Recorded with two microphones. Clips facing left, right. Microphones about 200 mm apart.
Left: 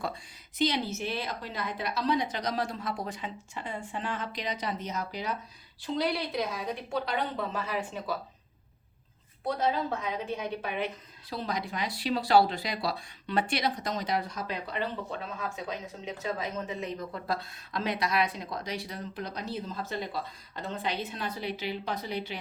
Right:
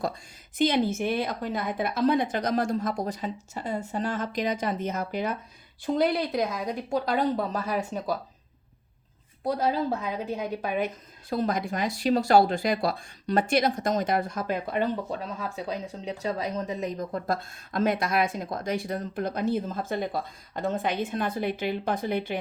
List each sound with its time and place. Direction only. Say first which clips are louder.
0.6 s speech: right 6 dB; 50° right (ahead or behind)
9.4 s speech: right 3 dB; 40° right (ahead or behind)